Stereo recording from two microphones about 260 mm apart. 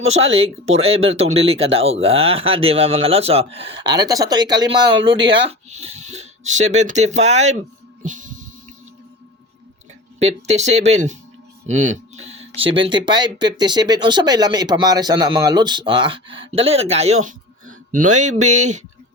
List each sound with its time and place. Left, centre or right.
0.0 s speech: right
8.0 s music: right
10.2 s speech: right